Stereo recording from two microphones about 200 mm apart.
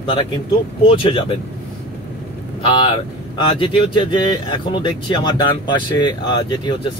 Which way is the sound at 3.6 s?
25° left (ahead or behind).